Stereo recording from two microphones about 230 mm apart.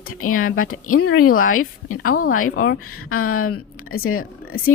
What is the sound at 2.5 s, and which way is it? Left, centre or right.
Speech, left.